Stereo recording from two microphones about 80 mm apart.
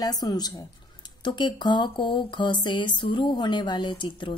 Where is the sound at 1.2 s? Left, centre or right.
Left.